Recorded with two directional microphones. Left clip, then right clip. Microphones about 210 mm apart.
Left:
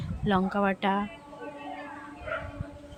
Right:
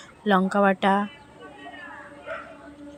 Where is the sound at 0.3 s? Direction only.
35° right (ahead or behind).